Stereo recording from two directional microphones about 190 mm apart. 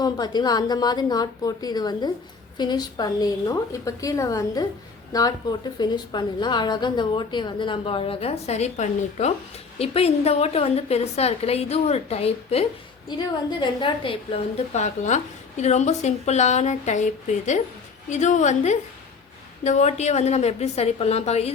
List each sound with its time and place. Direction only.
0.0 s a woman's voice: 20° left (ahead or behind)